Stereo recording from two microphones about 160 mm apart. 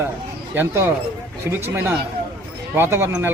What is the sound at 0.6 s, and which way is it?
Speech, 15° right (ahead or behind).